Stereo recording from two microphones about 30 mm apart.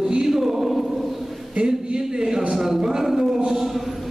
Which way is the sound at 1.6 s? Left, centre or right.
Right.